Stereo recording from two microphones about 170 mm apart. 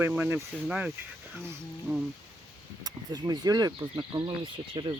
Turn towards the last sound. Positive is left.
turn(degrees=-30)  # may be behind; listen again after turning